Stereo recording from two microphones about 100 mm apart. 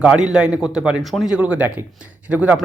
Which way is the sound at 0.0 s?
5° right (ahead or behind).